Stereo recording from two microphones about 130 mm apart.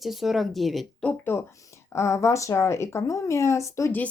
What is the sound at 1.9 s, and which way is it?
Speech, 20° left (ahead or behind).